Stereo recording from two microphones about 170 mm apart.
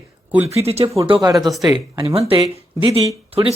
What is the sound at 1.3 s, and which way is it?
Speech, centre (ahead or behind).